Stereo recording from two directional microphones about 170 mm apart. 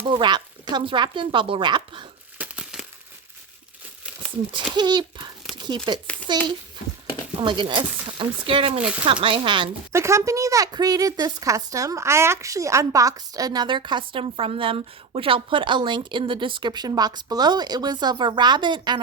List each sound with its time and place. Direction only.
0.0 s speech: 30° right (ahead or behind)
2.4 s crumpling: 5° right (ahead or behind)
4.5 s a woman's voice: 25° right (ahead or behind)
9.9 s a woman's voice: 15° right (ahead or behind)